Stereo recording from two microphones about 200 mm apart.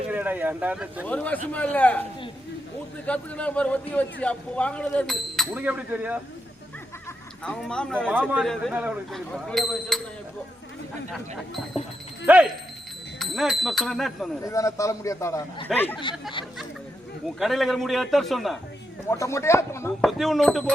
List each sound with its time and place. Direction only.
0.1 s speech: 10° right (ahead or behind)
1.0 s a man's voice: 5° left (ahead or behind)
3.1 s a man's voice: 5° left (ahead or behind)
7.4 s a man's voice: 5° left (ahead or behind)
11.1 s a man's voice: centre (ahead or behind)
14.4 s a man's voice: 15° left (ahead or behind)
17.2 s a man's voice: centre (ahead or behind)
19.1 s a man's voice: 15° left (ahead or behind)
20.1 s a man's voice: centre (ahead or behind)